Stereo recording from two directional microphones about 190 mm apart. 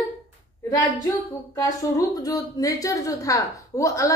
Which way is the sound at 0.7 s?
20° left (ahead or behind).